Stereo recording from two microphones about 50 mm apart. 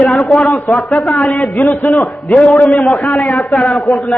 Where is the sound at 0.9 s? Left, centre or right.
Centre.